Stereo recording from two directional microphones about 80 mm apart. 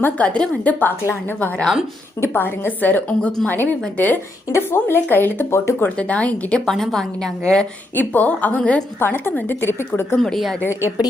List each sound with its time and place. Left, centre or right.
0.0 s a woman's voice: centre
4.5 s a woman's voice: left
6.0 s speech: centre
6.7 s a woman's voice: centre
7.9 s a woman's voice: left
10.2 s a woman's voice: centre